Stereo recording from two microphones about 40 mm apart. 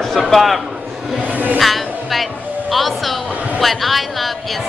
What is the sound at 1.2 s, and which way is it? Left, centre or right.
Speech, right.